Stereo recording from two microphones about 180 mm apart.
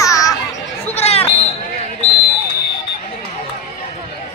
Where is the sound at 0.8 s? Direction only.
35° left (ahead or behind).